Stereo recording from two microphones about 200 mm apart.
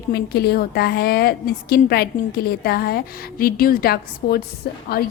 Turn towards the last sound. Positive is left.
turn(degrees=50)  # may be behind; listen again after turning